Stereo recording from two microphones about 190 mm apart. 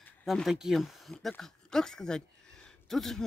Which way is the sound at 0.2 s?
Centre (ahead or behind).